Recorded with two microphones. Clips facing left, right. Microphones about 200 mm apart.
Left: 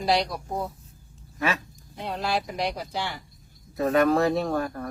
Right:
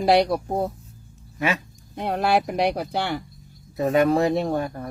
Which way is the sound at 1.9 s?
60° right (ahead or behind).